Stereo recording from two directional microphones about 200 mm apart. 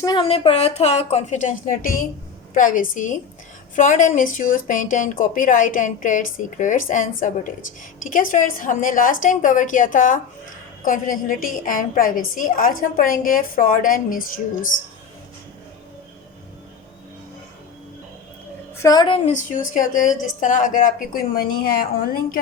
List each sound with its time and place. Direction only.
0.0 s a woman's voice: 25° left (ahead or behind); by 14.2 s 45° left (ahead or behind)
18.8 s a woman's voice: 20° left (ahead or behind)
19.3 s speech: 40° left (ahead or behind)